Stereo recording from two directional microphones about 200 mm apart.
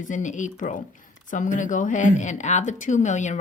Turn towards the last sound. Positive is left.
turn(degrees=35)  # may be behind; listen again after turning